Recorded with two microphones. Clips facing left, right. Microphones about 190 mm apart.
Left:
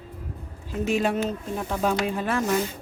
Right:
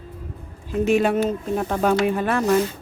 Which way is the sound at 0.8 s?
60° right (ahead or behind).